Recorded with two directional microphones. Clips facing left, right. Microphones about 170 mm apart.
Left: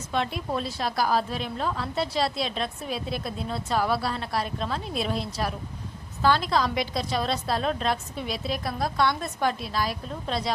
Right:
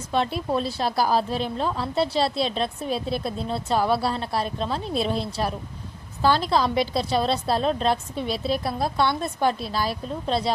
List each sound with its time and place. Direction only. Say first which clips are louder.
0.1 s a woman's voice: right 4 dB; 35° right (ahead or behind)